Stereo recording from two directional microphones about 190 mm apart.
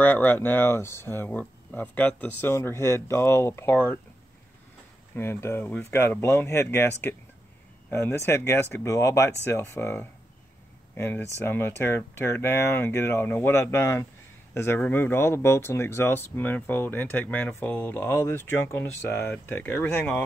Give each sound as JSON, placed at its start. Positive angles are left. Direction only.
{"t": 0.0, "sound": "speech", "side_deg": 10}
{"t": 5.1, "sound": "speech", "side_deg": 10}